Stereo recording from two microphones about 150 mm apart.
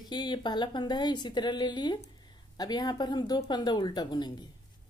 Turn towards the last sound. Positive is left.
turn(degrees=30)  # may be behind; listen again after turning